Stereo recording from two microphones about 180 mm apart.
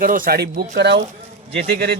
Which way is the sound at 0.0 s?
50° right (ahead or behind).